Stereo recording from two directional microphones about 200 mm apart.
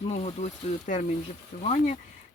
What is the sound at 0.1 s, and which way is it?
Speech, 35° left (ahead or behind).